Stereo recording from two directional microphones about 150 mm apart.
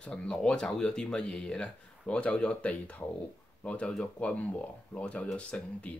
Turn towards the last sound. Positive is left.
turn(degrees=10)  # may be behind; listen again after turning